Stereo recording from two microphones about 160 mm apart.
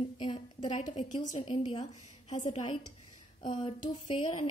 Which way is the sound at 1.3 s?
30° left (ahead or behind).